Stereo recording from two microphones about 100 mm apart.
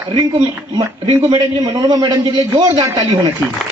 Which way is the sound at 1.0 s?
60° right (ahead or behind).